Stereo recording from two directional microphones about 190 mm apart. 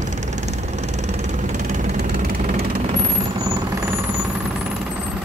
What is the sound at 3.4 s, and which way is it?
Vehicle, 15° right (ahead or behind).